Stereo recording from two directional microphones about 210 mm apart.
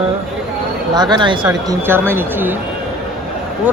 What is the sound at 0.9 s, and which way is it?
Speech, 20° right (ahead or behind).